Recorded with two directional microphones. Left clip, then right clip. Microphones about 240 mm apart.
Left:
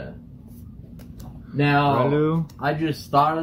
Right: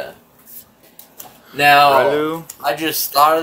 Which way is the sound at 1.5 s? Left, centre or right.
Right.